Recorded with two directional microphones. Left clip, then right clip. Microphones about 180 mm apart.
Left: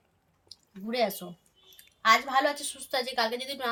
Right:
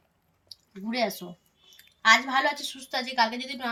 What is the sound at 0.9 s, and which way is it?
Speech, 25° left (ahead or behind).